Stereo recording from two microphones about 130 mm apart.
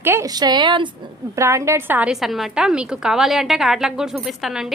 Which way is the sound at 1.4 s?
20° right (ahead or behind).